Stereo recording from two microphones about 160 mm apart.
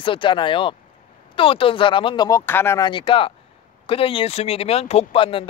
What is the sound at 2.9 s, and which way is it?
Speech, 30° left (ahead or behind).